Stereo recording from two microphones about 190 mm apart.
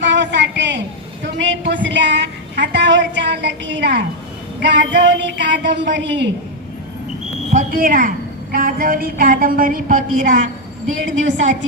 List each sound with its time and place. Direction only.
0.0 s a sound: 70° right (ahead or behind)
1.2 s a woman's voice: 70° right (ahead or behind)
7.5 s a woman's voice: 45° right (ahead or behind)
11.1 s a woman's voice: 80° right